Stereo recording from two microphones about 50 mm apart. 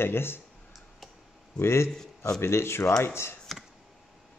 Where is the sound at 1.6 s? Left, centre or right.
Left.